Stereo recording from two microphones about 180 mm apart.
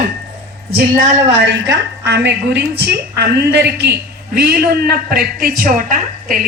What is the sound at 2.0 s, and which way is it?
A woman's voice, 70° right (ahead or behind).